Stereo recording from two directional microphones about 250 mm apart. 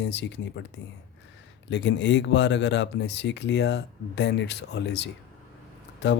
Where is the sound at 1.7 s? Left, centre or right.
Left.